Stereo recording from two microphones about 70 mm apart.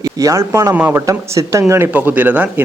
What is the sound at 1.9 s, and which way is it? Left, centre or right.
Speech, right.